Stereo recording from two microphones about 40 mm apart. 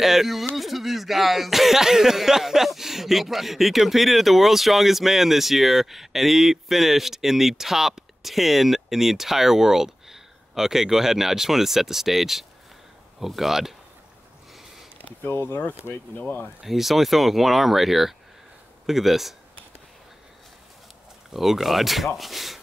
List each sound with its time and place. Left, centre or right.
0.0 s speech: centre
15.0 s a sound: left
15.3 s speech: left
16.6 s speech: centre
21.3 s speech: centre